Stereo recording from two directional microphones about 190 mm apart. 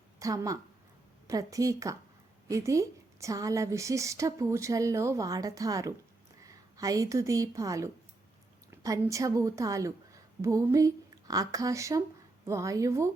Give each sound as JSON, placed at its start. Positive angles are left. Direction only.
{"t": 0.2, "sound": "a woman's voice", "side_deg": -15}